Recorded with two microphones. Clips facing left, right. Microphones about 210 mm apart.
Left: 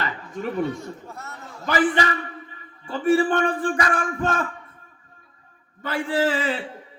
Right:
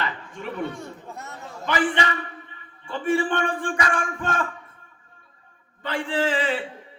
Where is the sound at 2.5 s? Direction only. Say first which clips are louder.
Left 2 dB; 40° left (ahead or behind).